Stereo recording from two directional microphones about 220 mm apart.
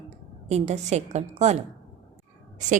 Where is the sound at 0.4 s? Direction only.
30° right (ahead or behind).